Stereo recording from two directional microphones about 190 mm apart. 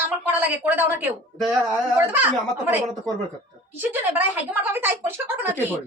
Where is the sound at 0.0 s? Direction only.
10° right (ahead or behind).